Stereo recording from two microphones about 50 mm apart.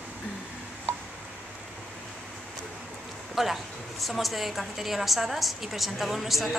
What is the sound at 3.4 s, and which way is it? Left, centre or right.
A woman's voice, centre.